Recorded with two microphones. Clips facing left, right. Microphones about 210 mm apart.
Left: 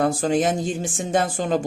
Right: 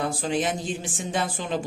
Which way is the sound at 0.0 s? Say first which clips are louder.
Left 6 dB; 45° left (ahead or behind).